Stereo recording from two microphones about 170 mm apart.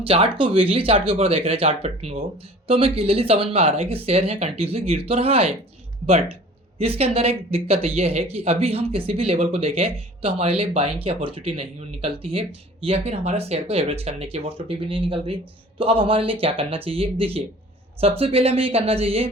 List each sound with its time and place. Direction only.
0.0 s speech: 30° right (ahead or behind)